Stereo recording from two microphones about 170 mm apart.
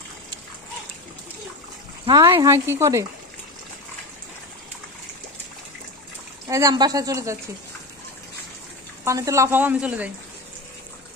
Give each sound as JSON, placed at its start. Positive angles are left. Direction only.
{"t": 2.0, "sound": "a woman's voice", "side_deg": -20}
{"t": 6.5, "sound": "a woman's voice", "side_deg": -20}
{"t": 9.0, "sound": "a woman's voice", "side_deg": -20}